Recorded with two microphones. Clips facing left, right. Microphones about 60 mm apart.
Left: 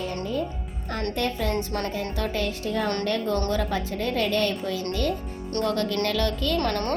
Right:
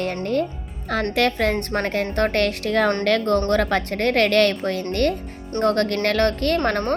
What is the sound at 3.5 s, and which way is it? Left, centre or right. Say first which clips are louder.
A woman's voice: right 6 dB; right.